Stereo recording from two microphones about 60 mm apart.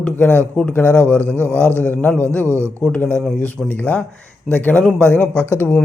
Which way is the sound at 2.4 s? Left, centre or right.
Right.